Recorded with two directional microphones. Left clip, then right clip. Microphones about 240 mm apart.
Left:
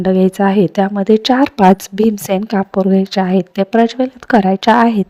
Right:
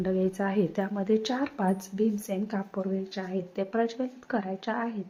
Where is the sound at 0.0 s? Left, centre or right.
Left.